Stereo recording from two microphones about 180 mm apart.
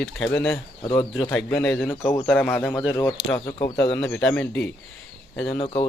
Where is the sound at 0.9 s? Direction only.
15° left (ahead or behind).